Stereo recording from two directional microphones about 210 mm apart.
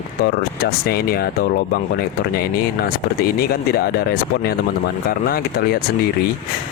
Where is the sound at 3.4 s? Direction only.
45° left (ahead or behind).